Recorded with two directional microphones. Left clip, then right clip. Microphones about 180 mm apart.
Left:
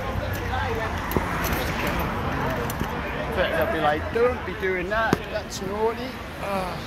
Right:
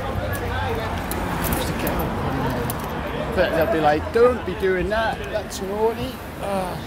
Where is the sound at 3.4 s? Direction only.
45° right (ahead or behind); by 5.4 s 30° right (ahead or behind).